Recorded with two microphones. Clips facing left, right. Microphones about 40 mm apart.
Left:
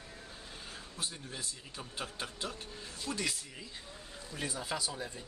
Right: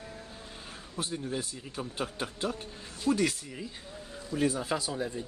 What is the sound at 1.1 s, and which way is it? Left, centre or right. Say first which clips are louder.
Speech: right 9 dB; centre.